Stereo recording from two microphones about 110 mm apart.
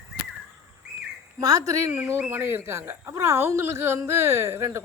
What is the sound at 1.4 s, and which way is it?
Speech, 30° right (ahead or behind).